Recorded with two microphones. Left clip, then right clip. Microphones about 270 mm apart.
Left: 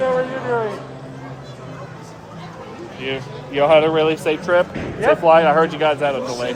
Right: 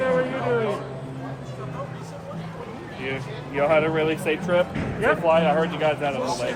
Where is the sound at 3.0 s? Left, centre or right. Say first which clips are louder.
Left 5 dB; left.